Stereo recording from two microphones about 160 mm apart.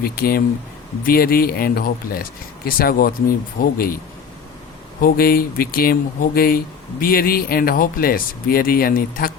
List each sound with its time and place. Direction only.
0.0 s speech: 70° left (ahead or behind)
4.9 s speech: 65° left (ahead or behind)